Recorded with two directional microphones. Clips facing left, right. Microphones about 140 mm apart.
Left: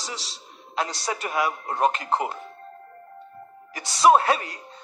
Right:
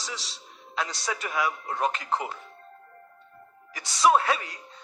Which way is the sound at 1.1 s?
55° left (ahead or behind).